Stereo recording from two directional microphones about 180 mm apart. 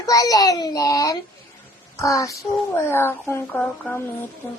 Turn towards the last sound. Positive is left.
turn(degrees=10)  # may be behind; listen again after turning